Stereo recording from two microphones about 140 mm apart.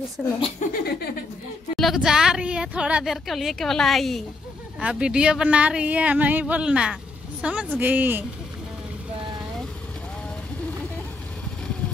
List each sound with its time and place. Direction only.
0.2 s a woman's voice: 10° right (ahead or behind)
0.6 s a sound: 60° left (ahead or behind)
1.8 s a woman's voice: centre (ahead or behind)